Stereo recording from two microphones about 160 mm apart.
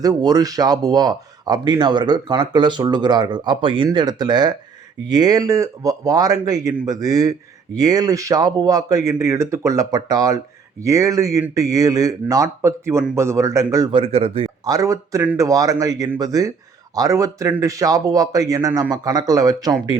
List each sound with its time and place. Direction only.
0.0 s speech: 25° right (ahead or behind)
13.9 s speech: 40° right (ahead or behind)
14.6 s a man's voice: 20° right (ahead or behind)